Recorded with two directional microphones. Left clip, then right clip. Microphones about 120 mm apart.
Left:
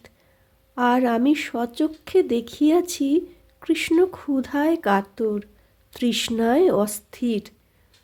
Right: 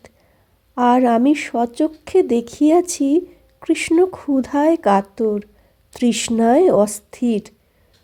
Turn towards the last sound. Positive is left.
turn(degrees=-35)  # may be behind; listen again after turning